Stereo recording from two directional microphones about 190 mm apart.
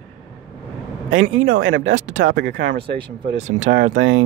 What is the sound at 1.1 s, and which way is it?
Speech, 90° right.